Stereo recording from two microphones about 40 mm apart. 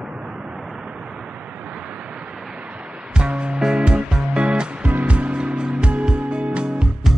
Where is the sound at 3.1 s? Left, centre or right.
Right.